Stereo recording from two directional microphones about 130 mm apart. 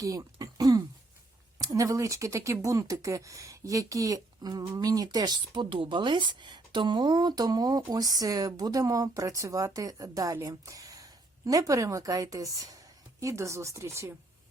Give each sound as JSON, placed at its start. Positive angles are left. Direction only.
{"t": 0.0, "sound": "throat clearing", "side_deg": -25}
{"t": 1.5, "sound": "speech", "side_deg": -25}